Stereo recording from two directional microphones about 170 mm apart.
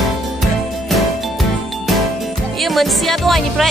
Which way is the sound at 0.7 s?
Centre (ahead or behind).